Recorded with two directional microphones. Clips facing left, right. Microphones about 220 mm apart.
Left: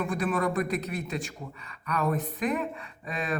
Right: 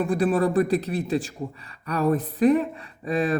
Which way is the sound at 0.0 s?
30° right (ahead or behind).